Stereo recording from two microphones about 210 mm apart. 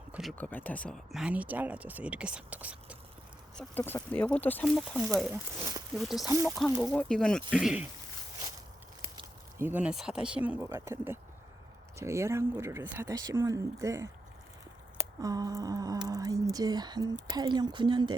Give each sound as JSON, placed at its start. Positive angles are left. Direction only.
{"t": 0.1, "sound": "speech", "side_deg": 0}
{"t": 3.6, "sound": "speech", "side_deg": 10}
{"t": 6.2, "sound": "speech", "side_deg": -15}
{"t": 6.8, "sound": "speech", "side_deg": 5}
{"t": 9.6, "sound": "speech", "side_deg": -10}